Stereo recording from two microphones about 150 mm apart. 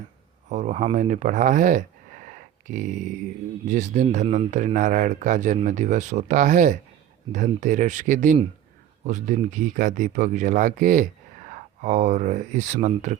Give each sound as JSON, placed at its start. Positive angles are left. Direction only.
{"t": 0.4, "sound": "speech", "side_deg": -55}
{"t": 2.2, "sound": "a sound", "side_deg": -60}
{"t": 3.7, "sound": "speech", "side_deg": -55}